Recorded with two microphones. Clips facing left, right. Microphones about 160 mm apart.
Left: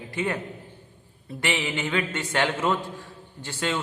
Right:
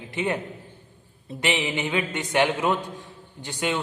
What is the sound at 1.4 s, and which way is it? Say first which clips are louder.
A man's voice: right 2 dB; 20° right (ahead or behind).